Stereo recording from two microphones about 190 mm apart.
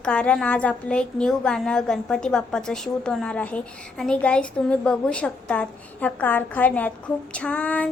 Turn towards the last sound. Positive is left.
turn(degrees=10)  # may be behind; listen again after turning